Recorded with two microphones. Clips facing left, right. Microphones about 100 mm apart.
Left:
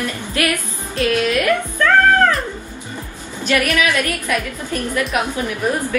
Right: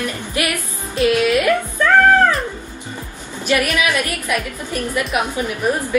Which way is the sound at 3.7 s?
15° right (ahead or behind).